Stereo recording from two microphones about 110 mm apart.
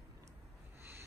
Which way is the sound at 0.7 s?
20° right (ahead or behind).